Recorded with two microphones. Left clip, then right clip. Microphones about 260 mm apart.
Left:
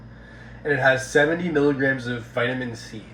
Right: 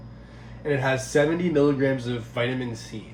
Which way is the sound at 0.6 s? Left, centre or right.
Centre.